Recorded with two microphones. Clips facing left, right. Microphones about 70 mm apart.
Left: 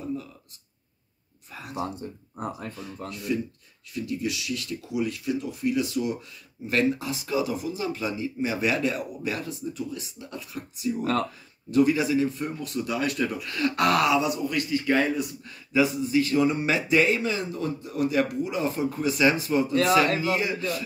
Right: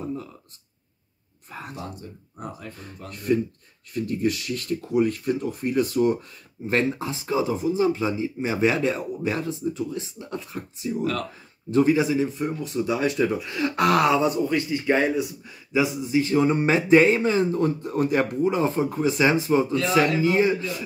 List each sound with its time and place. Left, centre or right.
0.0 s a sound: right
1.5 s speech: right
2.0 s speech: left
3.1 s speech: right
6.7 s speech: right